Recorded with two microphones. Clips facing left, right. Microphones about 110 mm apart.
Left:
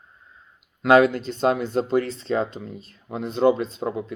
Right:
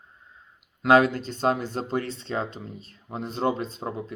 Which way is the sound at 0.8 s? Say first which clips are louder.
Left 3 dB; 40° right (ahead or behind).